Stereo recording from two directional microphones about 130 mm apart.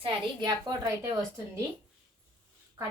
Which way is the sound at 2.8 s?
25° right (ahead or behind).